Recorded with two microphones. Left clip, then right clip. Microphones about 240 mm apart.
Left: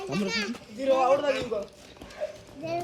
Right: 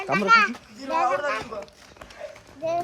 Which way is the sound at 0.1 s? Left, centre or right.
Centre.